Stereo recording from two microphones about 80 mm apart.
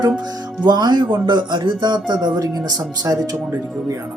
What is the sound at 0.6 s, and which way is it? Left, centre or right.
Speech, right.